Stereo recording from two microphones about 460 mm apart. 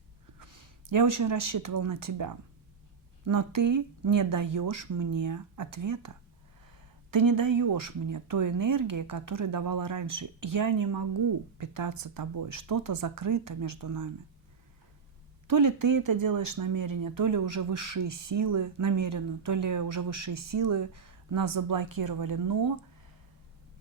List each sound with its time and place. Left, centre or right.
0.3 s speech: right
7.1 s speech: right
15.4 s speech: right